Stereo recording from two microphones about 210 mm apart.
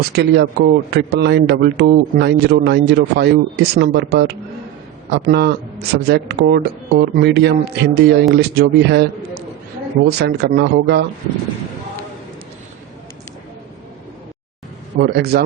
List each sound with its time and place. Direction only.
0.2 s a man's voice: 50° right (ahead or behind)
10.1 s a man's voice: 50° right (ahead or behind)
14.9 s a man's voice: 50° right (ahead or behind)